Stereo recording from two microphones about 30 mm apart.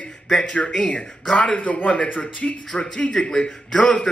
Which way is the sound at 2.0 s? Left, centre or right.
Left.